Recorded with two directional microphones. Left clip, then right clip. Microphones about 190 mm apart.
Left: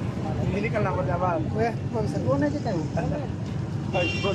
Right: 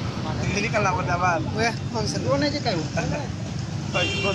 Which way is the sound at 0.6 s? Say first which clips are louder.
Right 4 dB; 15° left (ahead or behind).